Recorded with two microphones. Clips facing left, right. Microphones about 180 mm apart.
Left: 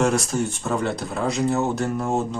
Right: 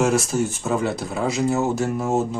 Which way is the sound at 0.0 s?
5° right (ahead or behind).